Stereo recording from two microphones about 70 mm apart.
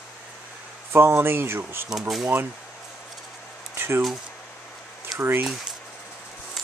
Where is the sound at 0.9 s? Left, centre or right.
Right.